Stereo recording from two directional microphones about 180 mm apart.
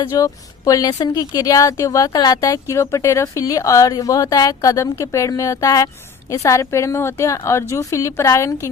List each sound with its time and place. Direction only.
0.0 s a woman's voice: 20° left (ahead or behind)